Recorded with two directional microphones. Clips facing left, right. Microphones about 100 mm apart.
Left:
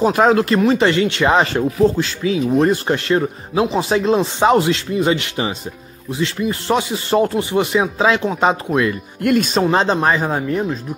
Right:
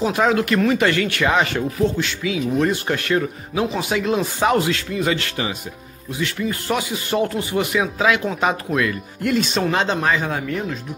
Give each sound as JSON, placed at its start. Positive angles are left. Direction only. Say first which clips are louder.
{"t": 0.0, "sound": "speech", "louder": "left 5 dB", "side_deg": 40}
{"t": 9.2, "sound": "speech", "louder": "left 4 dB", "side_deg": 50}
{"t": 9.6, "sound": "speech", "louder": "left 4 dB", "side_deg": 35}